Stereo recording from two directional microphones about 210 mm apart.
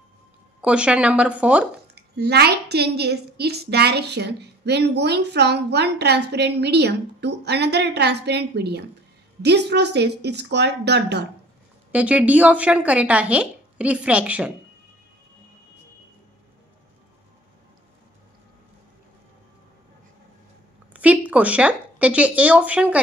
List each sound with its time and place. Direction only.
0.6 s a woman's voice: 5° right (ahead or behind)
2.0 s a child's voice: 50° right (ahead or behind)
11.9 s speech: 5° right (ahead or behind)
20.9 s speech: 5° right (ahead or behind)